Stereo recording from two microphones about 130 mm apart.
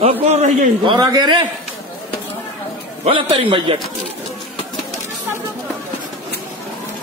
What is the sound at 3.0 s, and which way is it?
Speech, 45° right (ahead or behind).